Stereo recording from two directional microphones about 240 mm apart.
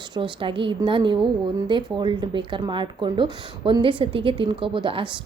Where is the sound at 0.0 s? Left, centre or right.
Centre.